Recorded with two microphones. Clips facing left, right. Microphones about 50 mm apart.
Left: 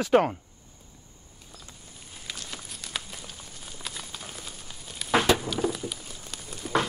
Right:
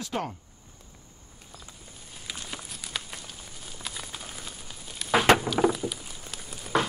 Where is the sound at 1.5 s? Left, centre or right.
Centre.